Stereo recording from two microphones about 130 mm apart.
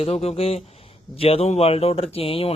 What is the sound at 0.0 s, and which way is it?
Speech, 50° left (ahead or behind).